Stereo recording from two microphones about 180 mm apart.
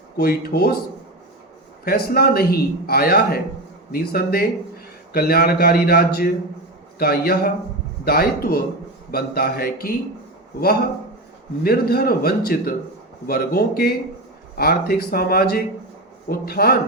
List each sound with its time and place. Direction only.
0.2 s a man's voice: 60° left (ahead or behind)
1.8 s a man's voice: 55° left (ahead or behind)